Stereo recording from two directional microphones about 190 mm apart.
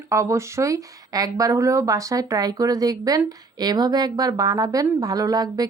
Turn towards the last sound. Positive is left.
turn(degrees=-20)  # may be behind; listen again after turning